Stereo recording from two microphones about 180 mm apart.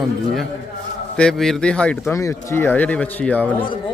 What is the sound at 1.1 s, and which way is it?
Speech, 5° left (ahead or behind).